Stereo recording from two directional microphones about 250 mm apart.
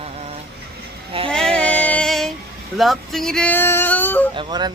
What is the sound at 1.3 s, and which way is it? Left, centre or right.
Child singing, centre.